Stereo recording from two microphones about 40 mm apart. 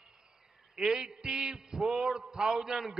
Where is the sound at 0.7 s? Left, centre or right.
Centre.